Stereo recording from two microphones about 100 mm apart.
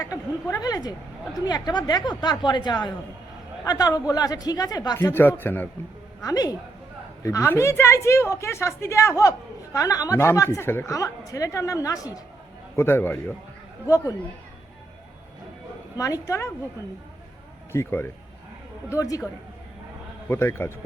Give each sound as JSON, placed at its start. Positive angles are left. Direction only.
{"t": 0.0, "sound": "a woman's voice", "side_deg": 35}
{"t": 4.9, "sound": "a woman's voice", "side_deg": 25}
{"t": 6.2, "sound": "a woman's voice", "side_deg": 40}
{"t": 7.2, "sound": "a woman's voice", "side_deg": 30}
{"t": 12.7, "sound": "a woman's voice", "side_deg": 25}
{"t": 13.8, "sound": "a woman's voice", "side_deg": 35}
{"t": 16.0, "sound": "a woman's voice", "side_deg": 35}
{"t": 17.7, "sound": "a woman's voice", "side_deg": 25}
{"t": 20.2, "sound": "a woman's voice", "side_deg": 20}